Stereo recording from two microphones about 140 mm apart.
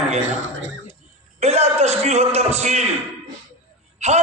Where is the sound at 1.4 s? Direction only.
50° right (ahead or behind).